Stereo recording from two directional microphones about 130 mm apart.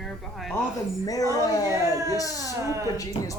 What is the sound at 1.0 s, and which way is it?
Speech, 25° left (ahead or behind).